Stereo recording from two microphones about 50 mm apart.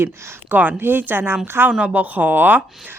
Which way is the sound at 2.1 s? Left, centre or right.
Right.